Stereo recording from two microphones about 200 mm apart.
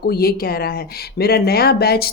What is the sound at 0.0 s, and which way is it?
Speech, 50° left (ahead or behind).